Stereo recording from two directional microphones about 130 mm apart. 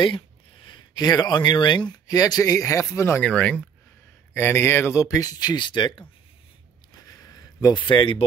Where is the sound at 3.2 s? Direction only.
10° left (ahead or behind).